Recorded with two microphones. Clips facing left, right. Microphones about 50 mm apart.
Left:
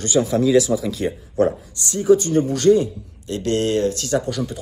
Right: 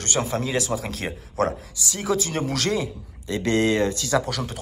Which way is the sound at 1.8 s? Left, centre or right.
Right.